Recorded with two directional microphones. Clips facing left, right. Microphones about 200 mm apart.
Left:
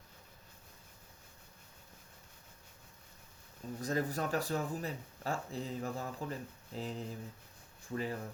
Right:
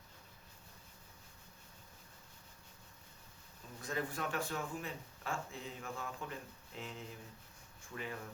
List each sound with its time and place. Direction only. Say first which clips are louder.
3.8 s speech: left 5 dB; 40° left (ahead or behind)